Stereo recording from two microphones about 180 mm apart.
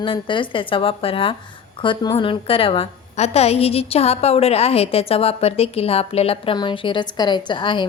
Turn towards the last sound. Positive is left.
turn(degrees=25)  # may be behind; listen again after turning